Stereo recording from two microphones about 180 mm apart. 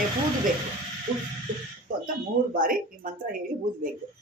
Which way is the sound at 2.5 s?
50° right (ahead or behind).